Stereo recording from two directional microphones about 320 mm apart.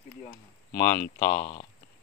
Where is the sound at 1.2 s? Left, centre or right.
Centre.